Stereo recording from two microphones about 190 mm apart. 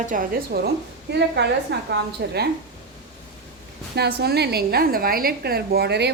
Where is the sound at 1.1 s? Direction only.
65° right (ahead or behind).